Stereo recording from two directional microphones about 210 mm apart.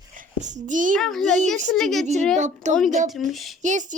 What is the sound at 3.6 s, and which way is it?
Speech, 35° right (ahead or behind).